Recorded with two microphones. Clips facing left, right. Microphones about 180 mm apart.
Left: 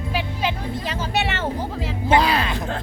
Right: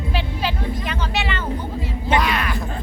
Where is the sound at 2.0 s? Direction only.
30° left (ahead or behind).